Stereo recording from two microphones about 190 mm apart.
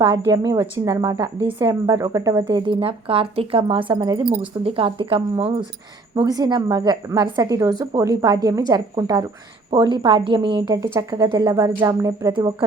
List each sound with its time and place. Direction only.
0.0 s a woman's voice: 20° right (ahead or behind)